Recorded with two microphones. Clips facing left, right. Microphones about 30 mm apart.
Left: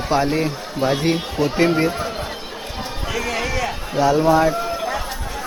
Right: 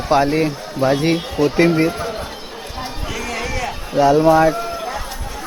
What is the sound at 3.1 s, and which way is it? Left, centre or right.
Run, centre.